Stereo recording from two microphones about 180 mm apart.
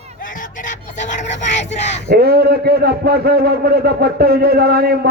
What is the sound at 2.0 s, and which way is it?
A man's voice, 60° right (ahead or behind).